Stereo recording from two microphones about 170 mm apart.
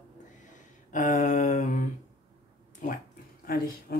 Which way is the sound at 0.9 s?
45° left (ahead or behind).